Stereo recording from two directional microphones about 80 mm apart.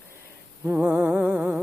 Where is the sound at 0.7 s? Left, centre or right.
Centre.